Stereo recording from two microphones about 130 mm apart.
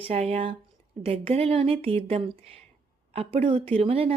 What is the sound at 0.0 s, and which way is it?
A woman's voice, 55° right (ahead or behind).